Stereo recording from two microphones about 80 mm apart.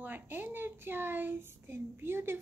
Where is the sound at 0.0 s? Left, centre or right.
Right.